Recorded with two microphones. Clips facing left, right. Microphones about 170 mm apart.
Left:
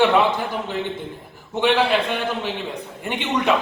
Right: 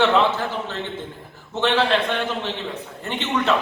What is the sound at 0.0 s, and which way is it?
A man's voice, 10° left (ahead or behind).